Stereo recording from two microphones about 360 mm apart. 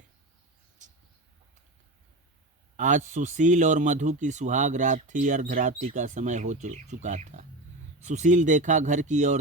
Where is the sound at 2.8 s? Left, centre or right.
Right.